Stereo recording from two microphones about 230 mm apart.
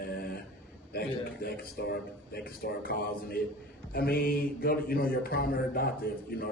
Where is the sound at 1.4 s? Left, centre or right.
Left.